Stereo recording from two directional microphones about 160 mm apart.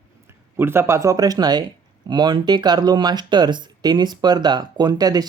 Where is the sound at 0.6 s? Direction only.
15° right (ahead or behind).